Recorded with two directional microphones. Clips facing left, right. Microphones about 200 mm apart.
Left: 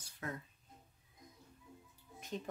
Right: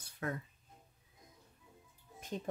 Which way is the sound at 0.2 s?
65° right (ahead or behind).